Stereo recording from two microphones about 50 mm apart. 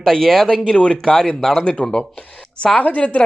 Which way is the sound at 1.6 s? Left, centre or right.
Left.